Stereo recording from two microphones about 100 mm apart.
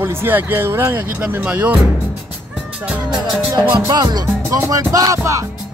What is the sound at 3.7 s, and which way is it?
Music, 45° right (ahead or behind).